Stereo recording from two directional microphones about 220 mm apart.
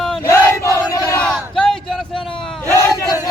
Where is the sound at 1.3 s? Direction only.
Centre (ahead or behind).